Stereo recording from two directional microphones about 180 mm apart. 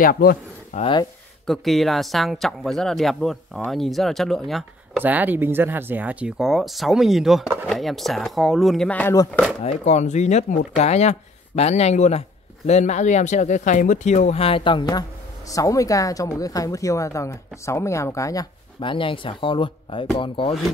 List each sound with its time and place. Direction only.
0.0 s speech: 55° left (ahead or behind)
0.7 s speech: 30° left (ahead or behind)
1.4 s speech: centre (ahead or behind)
5.0 s speech: 10° right (ahead or behind); by 9.1 s 5° left (ahead or behind)
9.1 s speech: 20° left (ahead or behind)
9.6 s speech: 35° left (ahead or behind)